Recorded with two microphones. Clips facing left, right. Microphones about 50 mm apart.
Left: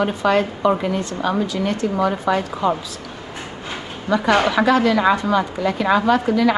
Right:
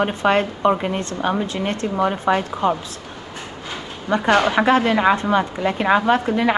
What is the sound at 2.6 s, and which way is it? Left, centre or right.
Speech, right.